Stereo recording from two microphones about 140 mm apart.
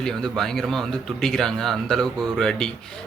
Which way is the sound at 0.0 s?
5° left (ahead or behind).